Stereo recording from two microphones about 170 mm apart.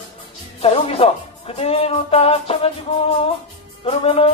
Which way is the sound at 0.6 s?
35° left (ahead or behind).